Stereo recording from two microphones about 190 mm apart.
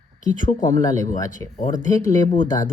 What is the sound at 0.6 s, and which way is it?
Speech, 20° left (ahead or behind).